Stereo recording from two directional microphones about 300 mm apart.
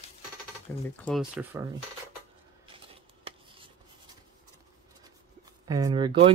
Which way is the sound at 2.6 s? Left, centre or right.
Centre.